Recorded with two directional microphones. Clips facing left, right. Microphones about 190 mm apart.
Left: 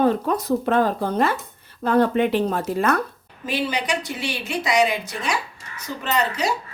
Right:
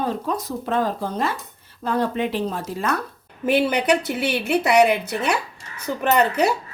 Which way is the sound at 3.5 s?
60° right (ahead or behind).